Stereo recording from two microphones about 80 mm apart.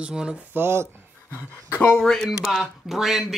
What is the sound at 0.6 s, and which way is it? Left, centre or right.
Speech, right.